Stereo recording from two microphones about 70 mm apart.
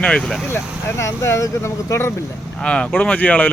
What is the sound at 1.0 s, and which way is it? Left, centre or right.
Speech, left.